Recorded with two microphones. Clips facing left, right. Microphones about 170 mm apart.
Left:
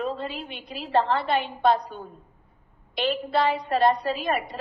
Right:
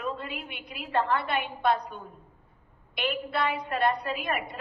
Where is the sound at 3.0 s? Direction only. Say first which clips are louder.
Left 5 dB; 30° left (ahead or behind).